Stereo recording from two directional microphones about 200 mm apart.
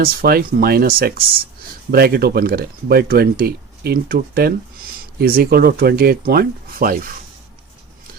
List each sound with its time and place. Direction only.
0.0 s speech: 50° right (ahead or behind)